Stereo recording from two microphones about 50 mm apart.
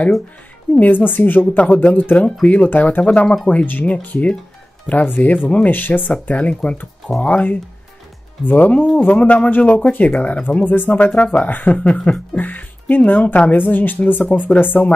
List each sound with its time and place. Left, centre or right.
0.7 s speech: left
5.7 s speech: left